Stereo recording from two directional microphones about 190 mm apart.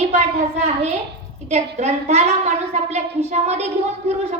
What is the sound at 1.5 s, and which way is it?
A woman's voice, 35° right (ahead or behind).